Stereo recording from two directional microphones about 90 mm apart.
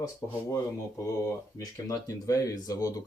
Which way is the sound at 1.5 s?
35° left (ahead or behind).